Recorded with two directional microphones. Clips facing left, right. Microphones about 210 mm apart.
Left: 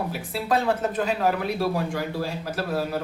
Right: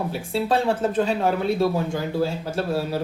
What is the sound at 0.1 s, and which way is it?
Speech, 30° right (ahead or behind).